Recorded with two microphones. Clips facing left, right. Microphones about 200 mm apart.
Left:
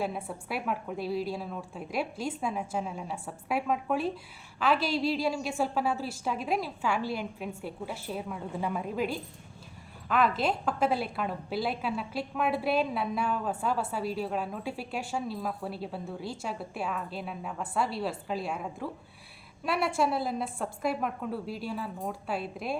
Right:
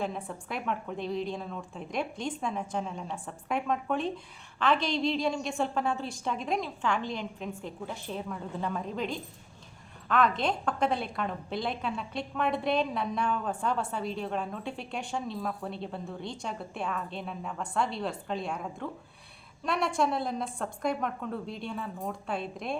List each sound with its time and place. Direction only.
0.0 s a woman's voice: 5° left (ahead or behind)